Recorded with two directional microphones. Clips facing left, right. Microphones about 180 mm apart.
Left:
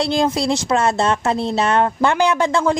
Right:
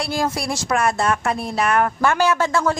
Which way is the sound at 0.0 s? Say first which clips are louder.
Left 5 dB; 20° left (ahead or behind).